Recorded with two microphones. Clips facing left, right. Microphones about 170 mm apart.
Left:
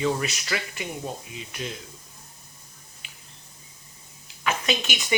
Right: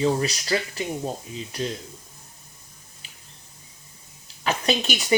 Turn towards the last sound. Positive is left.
turn(degrees=-35)  # may be behind; listen again after turning